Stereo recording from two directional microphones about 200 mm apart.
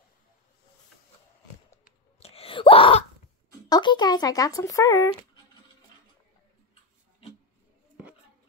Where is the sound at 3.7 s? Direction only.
20° left (ahead or behind).